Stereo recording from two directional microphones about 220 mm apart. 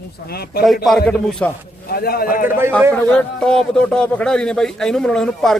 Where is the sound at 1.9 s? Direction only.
45° left (ahead or behind).